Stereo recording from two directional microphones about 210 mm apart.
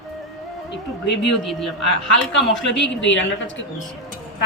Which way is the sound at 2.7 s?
60° left (ahead or behind).